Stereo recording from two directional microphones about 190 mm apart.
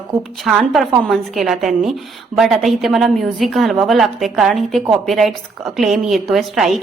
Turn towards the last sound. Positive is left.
turn(degrees=0)  # may be behind; listen again after turning